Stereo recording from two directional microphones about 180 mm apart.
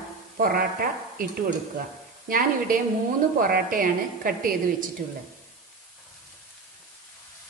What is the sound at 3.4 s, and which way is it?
A woman's voice, 50° right (ahead or behind).